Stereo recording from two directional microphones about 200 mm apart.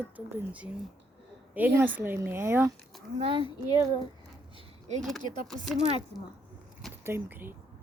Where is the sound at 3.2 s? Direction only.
25° right (ahead or behind).